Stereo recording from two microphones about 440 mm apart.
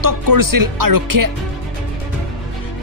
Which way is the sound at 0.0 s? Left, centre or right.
Right.